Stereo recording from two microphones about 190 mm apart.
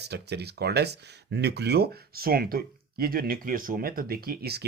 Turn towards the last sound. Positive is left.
turn(degrees=-55)  # may be behind; listen again after turning